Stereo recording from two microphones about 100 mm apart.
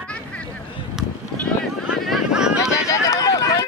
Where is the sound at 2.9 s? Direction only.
35° left (ahead or behind).